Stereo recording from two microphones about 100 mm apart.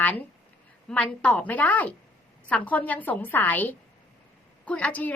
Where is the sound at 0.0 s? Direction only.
15° left (ahead or behind).